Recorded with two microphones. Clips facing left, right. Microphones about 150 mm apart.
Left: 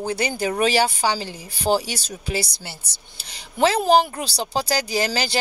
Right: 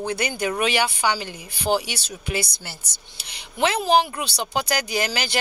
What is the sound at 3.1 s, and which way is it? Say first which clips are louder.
Speech: left 3 dB; 40° left (ahead or behind).